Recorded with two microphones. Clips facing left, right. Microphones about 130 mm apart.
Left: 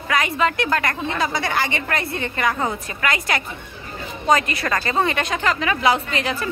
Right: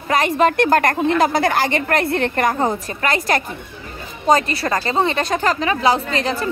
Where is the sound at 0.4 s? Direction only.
45° right (ahead or behind).